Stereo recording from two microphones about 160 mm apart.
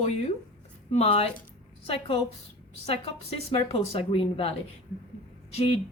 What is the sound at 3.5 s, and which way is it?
A woman's voice, 35° left (ahead or behind).